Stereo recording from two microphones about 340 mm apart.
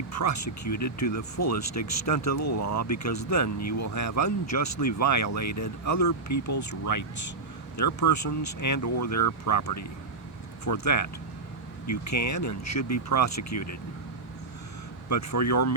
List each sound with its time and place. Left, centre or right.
0.1 s speech: left
15.1 s speech: left